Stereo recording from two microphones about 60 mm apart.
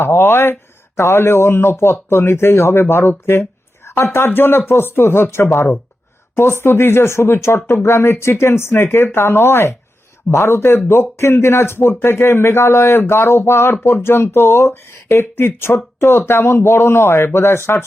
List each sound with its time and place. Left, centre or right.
0.0 s speech: left